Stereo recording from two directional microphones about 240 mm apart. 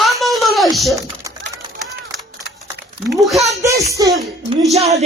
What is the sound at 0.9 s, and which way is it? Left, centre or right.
Typing, centre.